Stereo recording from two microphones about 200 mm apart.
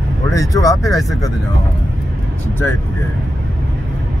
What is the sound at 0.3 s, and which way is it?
Speech, 15° left (ahead or behind).